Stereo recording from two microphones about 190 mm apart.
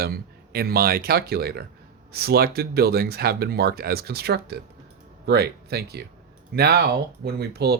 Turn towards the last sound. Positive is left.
turn(degrees=-60)  # may be behind; listen again after turning